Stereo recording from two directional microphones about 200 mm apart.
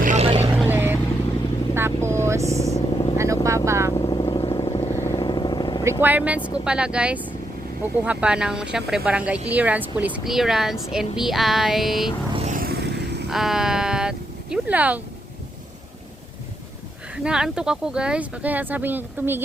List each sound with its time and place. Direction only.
0.0 s vehicle: 35° right (ahead or behind)
0.5 s vehicle: 10° right (ahead or behind)
2.7 s vehicle: 25° left (ahead or behind)
3.2 s vehicle: 15° right (ahead or behind)
3.9 s vehicle: 20° left (ahead or behind)
5.8 s speech: 10° right (ahead or behind)
12.3 s vehicle: 30° right (ahead or behind)
12.5 s vehicle: 50° right (ahead or behind)
13.2 s speech: centre (ahead or behind)
17.2 s speech: 5° right (ahead or behind)